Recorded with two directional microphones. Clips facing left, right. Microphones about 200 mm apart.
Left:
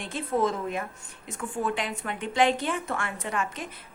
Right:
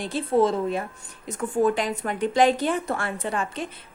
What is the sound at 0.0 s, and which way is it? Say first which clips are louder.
A woman's voice: right 5 dB; 35° right (ahead or behind).